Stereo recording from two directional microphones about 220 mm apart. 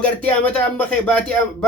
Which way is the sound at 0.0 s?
5° left (ahead or behind).